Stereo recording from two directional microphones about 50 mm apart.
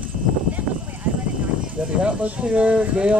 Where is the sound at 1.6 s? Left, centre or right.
Right.